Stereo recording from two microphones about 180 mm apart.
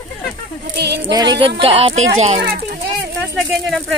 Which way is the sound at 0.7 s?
65° right (ahead or behind).